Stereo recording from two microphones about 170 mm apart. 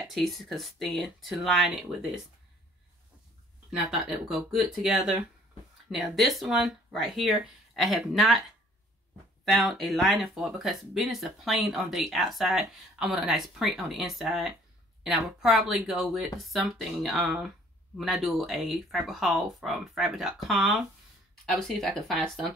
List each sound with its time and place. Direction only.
0.1 s speech: centre (ahead or behind)
3.7 s speech: 5° right (ahead or behind)
9.4 s speech: centre (ahead or behind)